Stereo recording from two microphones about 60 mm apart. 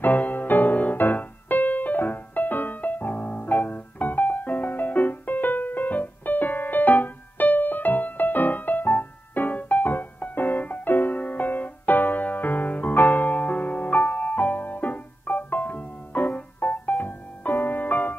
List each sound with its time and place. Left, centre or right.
0.0 s music: left